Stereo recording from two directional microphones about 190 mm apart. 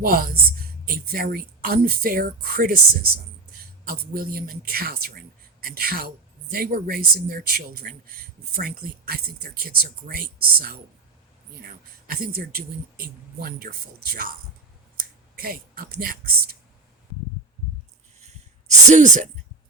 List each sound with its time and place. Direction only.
0.0 s a woman's voice: 50° right (ahead or behind)
12.0 s speech: 50° right (ahead or behind)
15.4 s speech: 50° right (ahead or behind)
18.9 s speech: 40° right (ahead or behind)